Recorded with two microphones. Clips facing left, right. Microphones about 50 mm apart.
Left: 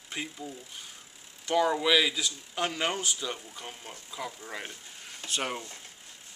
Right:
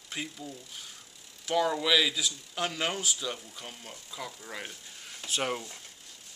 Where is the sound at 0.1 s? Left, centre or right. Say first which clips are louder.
Left 1 dB; centre.